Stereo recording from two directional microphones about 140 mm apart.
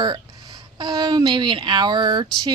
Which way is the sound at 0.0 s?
30° right (ahead or behind).